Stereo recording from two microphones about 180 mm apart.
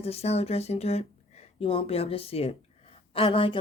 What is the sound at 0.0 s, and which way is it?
Speech, 35° left (ahead or behind).